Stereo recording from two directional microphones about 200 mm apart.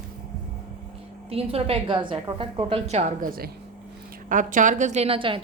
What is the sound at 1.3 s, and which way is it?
A woman's voice, 30° right (ahead or behind).